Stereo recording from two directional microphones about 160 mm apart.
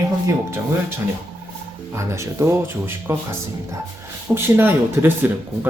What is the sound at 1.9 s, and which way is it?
Speech, 15° right (ahead or behind).